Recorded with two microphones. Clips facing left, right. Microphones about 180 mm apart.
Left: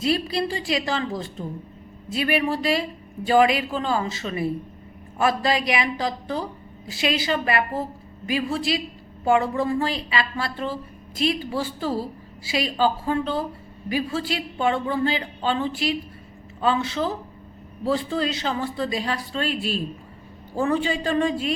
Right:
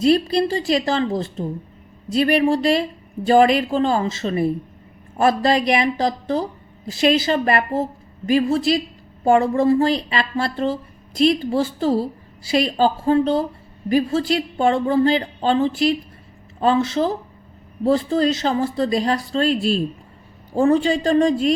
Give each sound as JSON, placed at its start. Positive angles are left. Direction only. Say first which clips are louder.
{"t": 0.0, "sound": "a woman's voice", "louder": "right 7 dB", "side_deg": -40}